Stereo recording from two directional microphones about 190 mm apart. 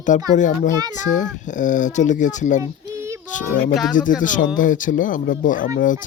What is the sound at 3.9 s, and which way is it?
Speech, 45° left (ahead or behind).